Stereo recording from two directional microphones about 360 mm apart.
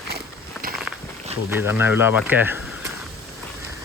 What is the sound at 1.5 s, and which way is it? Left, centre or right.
Speech, centre.